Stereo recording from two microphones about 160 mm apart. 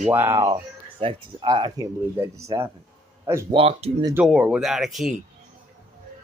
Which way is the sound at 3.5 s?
35° right (ahead or behind).